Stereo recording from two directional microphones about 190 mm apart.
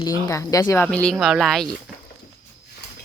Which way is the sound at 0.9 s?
5° left (ahead or behind).